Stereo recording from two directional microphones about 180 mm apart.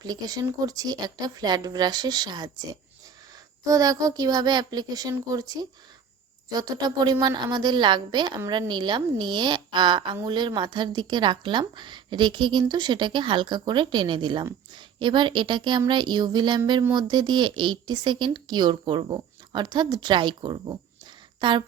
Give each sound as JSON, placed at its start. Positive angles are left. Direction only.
{"t": 0.0, "sound": "a woman's voice", "side_deg": -20}